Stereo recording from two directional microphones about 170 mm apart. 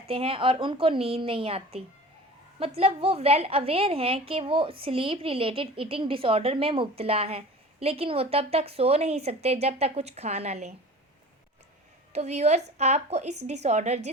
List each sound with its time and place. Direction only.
0.1 s a woman's voice: 35° right (ahead or behind)
12.1 s a woman's voice: 40° right (ahead or behind)